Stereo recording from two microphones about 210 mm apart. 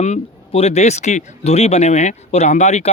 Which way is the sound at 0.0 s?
30° left (ahead or behind).